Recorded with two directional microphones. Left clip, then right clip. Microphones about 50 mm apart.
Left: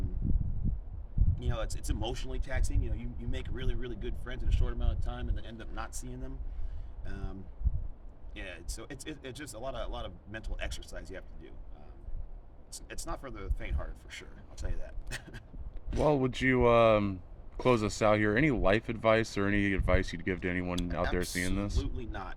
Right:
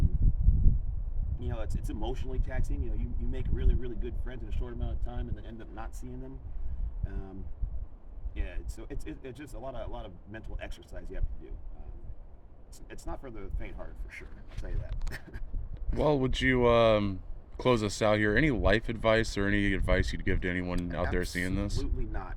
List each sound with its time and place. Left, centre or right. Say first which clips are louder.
1.4 s speech: left 2 dB; centre
8.4 s speech: left 3 dB; left
12.7 s speech: left 2 dB; centre
16.0 s speech: right 1 dB; right
21.8 s speech: even; left